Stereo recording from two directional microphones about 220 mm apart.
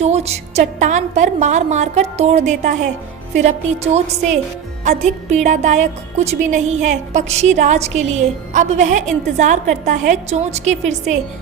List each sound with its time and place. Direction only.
0.0 s speech: 30° right (ahead or behind)
4.8 s speech: 30° right (ahead or behind)